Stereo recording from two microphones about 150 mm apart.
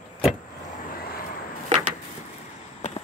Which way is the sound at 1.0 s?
80° left.